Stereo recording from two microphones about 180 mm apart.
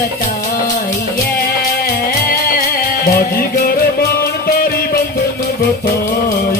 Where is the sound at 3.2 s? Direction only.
55° left (ahead or behind).